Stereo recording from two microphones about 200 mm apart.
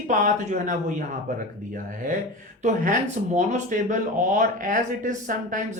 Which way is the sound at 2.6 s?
35° right (ahead or behind).